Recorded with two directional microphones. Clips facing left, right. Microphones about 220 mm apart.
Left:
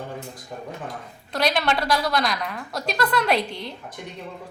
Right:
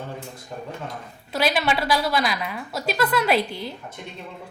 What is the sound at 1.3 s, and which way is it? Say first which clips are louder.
A woman's voice: even; 5° right (ahead or behind).